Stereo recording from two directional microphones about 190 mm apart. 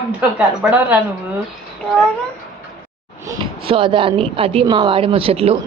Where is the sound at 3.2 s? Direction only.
25° right (ahead or behind).